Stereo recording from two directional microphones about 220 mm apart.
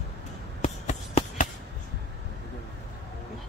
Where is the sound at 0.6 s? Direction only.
30° left (ahead or behind).